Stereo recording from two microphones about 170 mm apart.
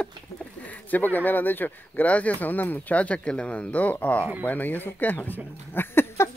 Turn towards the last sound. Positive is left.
turn(degrees=15)  # may be behind; listen again after turning